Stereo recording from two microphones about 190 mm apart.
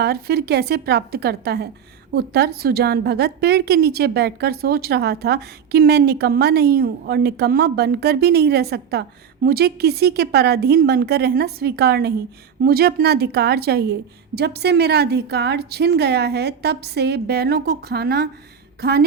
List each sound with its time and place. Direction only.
0.0 s a woman's voice: 55° right (ahead or behind)